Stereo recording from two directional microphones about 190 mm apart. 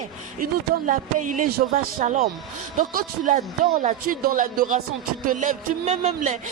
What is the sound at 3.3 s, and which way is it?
A man's voice, 40° right (ahead or behind).